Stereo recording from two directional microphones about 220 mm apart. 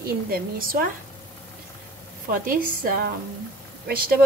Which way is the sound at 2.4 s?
40° right (ahead or behind).